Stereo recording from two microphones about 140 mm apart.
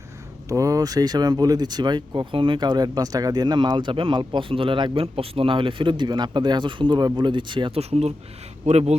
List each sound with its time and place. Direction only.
0.4 s speech: 25° right (ahead or behind)
7.8 s speech: 50° right (ahead or behind)